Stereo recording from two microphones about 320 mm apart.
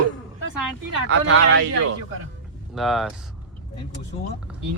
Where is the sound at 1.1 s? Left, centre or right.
Right.